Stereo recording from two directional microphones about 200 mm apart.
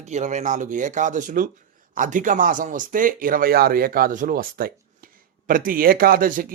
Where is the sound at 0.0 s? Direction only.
35° right (ahead or behind).